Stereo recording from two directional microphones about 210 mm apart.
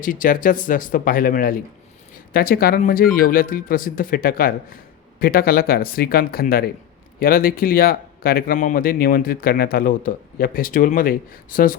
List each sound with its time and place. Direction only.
0.0 s speech: 40° left (ahead or behind)